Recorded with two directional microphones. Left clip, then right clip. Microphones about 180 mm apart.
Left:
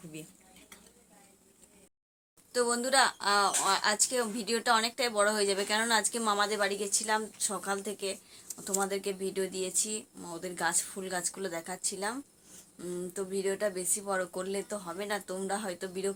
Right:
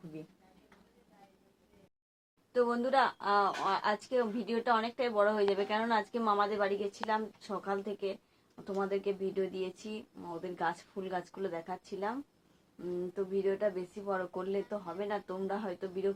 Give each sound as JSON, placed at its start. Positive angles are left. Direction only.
{"t": 2.5, "sound": "a woman's voice", "side_deg": 20}